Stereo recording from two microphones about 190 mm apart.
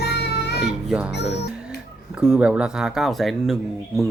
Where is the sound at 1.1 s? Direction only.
60° left (ahead or behind).